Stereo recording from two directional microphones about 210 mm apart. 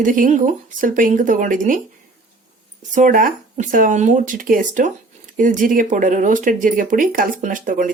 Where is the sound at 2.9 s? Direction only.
40° right (ahead or behind).